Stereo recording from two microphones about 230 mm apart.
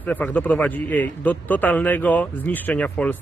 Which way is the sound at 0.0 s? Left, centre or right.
Centre.